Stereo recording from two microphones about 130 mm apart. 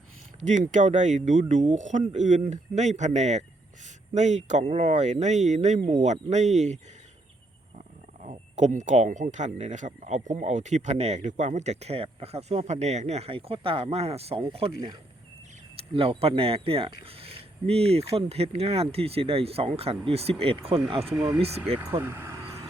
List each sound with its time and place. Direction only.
0.4 s speech: 70° right (ahead or behind)
8.2 s speech: 65° right (ahead or behind)
21.8 s speech: 15° right (ahead or behind)